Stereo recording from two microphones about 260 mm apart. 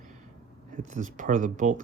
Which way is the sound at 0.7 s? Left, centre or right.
Right.